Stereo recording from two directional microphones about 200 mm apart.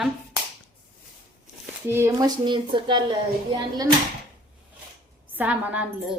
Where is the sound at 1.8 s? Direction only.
10° right (ahead or behind).